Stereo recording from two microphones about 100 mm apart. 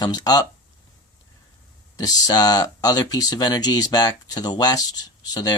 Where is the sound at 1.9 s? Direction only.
40° left (ahead or behind).